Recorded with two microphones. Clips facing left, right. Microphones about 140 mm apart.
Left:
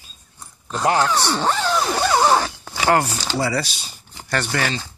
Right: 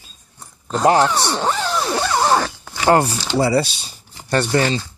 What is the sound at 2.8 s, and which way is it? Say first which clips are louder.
Speech: right 3 dB; 25° right (ahead or behind).